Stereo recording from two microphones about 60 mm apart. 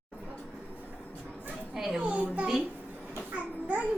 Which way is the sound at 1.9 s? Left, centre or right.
Centre.